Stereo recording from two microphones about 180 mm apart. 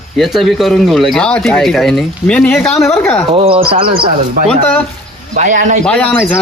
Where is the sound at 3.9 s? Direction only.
55° right (ahead or behind).